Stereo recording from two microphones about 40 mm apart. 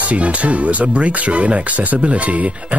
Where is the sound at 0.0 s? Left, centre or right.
Right.